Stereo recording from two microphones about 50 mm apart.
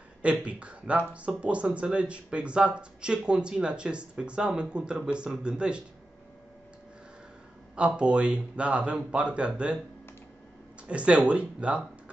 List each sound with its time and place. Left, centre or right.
0.2 s speech: right
7.7 s speech: right
10.9 s speech: right